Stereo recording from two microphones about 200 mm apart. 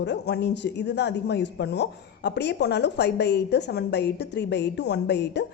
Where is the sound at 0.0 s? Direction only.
60° left (ahead or behind).